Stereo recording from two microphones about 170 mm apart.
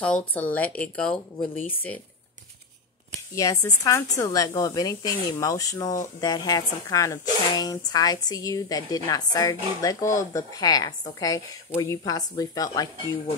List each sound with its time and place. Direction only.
0.0 s speech: 5° left (ahead or behind)
3.3 s speech: 20° left (ahead or behind)